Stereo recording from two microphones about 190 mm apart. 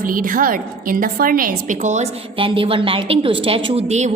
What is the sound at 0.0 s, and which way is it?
A woman's voice, 45° right (ahead or behind).